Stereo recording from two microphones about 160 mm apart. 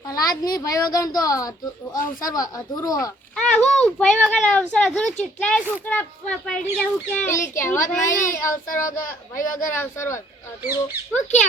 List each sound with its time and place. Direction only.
0.1 s a woman's voice: 25° left (ahead or behind)
3.3 s speech: 5° left (ahead or behind)
11.1 s speech: 45° left (ahead or behind)